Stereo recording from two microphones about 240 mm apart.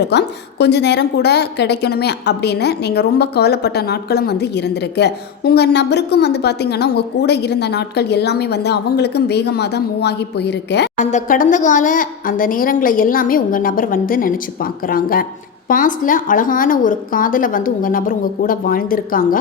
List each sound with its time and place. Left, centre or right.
0.0 s a woman's voice: left
10.9 s a woman's voice: left